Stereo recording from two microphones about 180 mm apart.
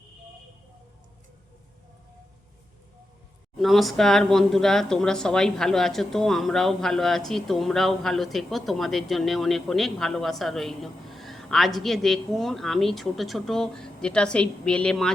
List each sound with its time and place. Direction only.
3.6 s a woman's voice: centre (ahead or behind)